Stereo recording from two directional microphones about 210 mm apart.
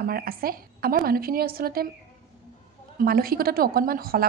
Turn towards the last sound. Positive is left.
turn(degrees=-45)  # may be behind; listen again after turning